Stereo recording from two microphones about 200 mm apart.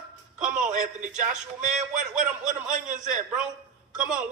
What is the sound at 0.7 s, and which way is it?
Speech, 40° right (ahead or behind).